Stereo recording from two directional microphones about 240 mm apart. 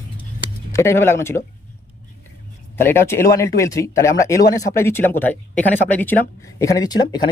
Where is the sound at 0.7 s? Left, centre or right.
Centre.